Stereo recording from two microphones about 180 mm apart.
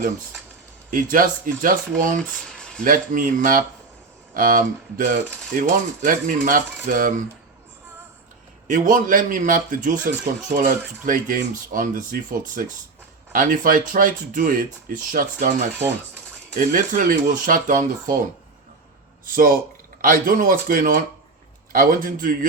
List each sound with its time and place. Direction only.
0.9 s speech: 50° right (ahead or behind)
2.3 s a sound: 5° left (ahead or behind)
2.8 s speech: 50° right (ahead or behind)
8.6 s speech: 45° right (ahead or behind)